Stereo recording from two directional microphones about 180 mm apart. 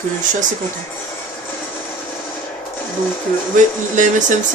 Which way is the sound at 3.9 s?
45° right (ahead or behind).